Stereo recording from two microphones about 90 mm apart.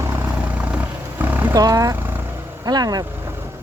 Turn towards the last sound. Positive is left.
turn(degrees=-45)  # may be behind; listen again after turning